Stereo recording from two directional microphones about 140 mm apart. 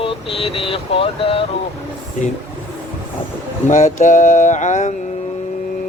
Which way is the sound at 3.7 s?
65° left (ahead or behind).